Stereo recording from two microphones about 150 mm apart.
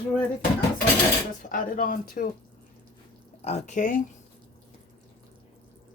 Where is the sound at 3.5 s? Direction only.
50° left (ahead or behind).